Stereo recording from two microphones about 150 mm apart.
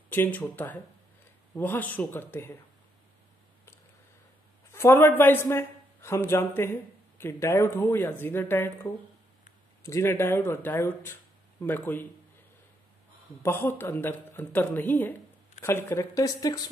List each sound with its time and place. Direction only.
0.1 s a man's voice: 10° left (ahead or behind)
4.7 s a man's voice: 15° left (ahead or behind)
13.4 s a man's voice: 15° left (ahead or behind)